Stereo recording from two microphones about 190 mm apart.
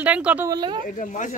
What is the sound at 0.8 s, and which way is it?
Speech, 40° left (ahead or behind).